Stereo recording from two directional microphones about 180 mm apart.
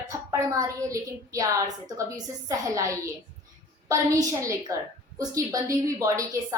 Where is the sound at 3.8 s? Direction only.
15° right (ahead or behind).